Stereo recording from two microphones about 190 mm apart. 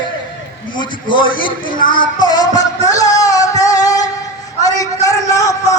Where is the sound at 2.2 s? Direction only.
20° left (ahead or behind).